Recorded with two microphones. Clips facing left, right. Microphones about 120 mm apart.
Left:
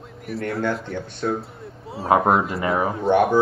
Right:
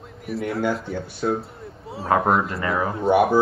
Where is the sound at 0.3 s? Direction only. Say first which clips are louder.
Right 1 dB; centre (ahead or behind).